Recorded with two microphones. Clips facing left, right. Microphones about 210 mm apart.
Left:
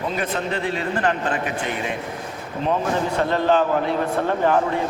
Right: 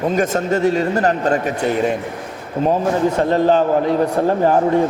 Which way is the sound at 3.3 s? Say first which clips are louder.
Right 3 dB; 40° right (ahead or behind).